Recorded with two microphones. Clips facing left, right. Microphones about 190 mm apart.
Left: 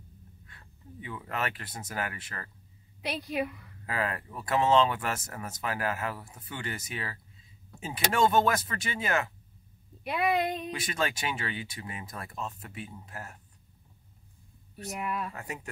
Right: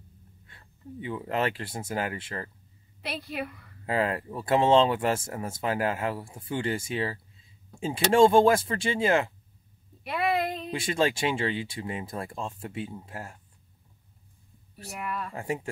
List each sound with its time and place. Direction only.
0.5 s a sound: 25° right (ahead or behind)
1.0 s speech: 25° right (ahead or behind)
3.1 s a woman's voice: centre (ahead or behind)
3.8 s speech: 25° right (ahead or behind)
10.0 s speech: centre (ahead or behind)
10.7 s speech: 25° right (ahead or behind)
14.9 s a woman's voice: 5° left (ahead or behind)
15.3 s speech: 25° right (ahead or behind)